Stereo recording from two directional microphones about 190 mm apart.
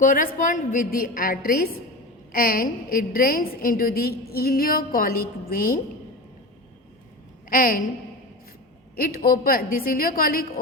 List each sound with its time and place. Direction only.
0.0 s a woman's voice: 45° left (ahead or behind)
7.5 s a woman's voice: 45° left (ahead or behind)
9.0 s a woman's voice: 50° left (ahead or behind)